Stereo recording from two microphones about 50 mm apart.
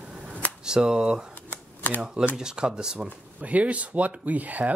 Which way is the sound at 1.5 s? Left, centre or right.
Left.